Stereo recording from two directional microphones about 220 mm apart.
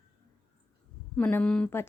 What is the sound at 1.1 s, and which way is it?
Speech, 5° left (ahead or behind).